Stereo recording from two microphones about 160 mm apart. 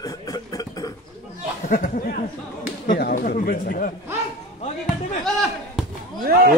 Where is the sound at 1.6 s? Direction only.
60° left (ahead or behind).